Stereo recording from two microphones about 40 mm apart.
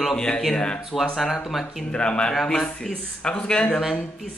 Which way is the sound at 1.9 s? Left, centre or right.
Left.